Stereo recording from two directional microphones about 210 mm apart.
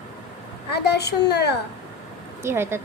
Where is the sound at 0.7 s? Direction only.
50° left (ahead or behind).